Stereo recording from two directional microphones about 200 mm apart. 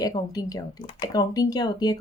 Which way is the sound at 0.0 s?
20° left (ahead or behind).